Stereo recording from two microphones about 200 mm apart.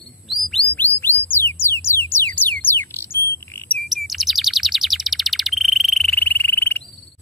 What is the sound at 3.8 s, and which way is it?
Bird, centre (ahead or behind).